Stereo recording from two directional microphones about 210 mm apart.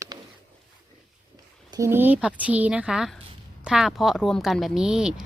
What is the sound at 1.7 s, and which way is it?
A woman's voice, 10° right (ahead or behind).